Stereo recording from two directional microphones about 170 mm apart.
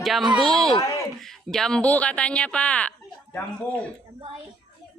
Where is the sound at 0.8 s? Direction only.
20° left (ahead or behind).